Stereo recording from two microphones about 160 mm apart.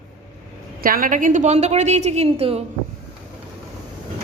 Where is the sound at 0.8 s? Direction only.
65° right (ahead or behind); by 2.6 s 40° right (ahead or behind).